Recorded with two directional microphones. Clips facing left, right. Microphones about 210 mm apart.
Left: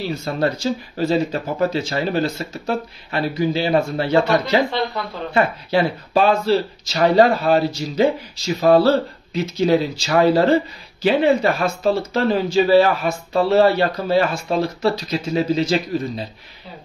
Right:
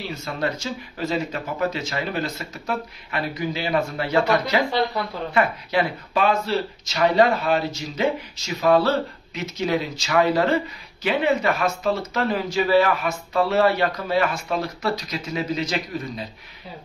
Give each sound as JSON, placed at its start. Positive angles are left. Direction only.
{"t": 0.0, "sound": "speech", "side_deg": 35}